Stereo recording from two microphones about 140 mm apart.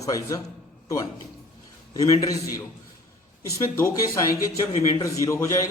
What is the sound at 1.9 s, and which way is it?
Speech, 25° left (ahead or behind).